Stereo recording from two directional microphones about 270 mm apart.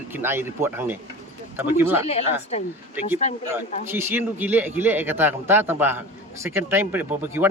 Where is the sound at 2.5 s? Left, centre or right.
Left.